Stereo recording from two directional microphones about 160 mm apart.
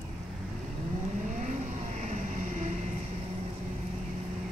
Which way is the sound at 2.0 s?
50° right (ahead or behind).